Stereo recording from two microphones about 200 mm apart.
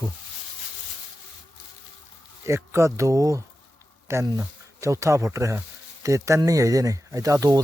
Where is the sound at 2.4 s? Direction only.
15° right (ahead or behind).